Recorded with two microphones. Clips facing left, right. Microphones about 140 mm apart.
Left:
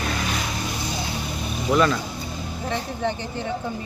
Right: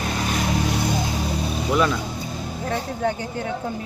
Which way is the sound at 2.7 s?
5° right (ahead or behind).